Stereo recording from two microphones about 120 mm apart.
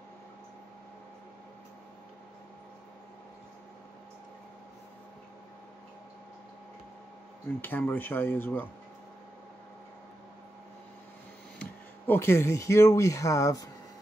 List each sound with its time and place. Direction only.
7.4 s speech: 20° left (ahead or behind)
12.1 s speech: 20° left (ahead or behind)